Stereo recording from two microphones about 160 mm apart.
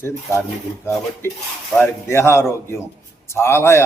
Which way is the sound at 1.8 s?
15° left (ahead or behind).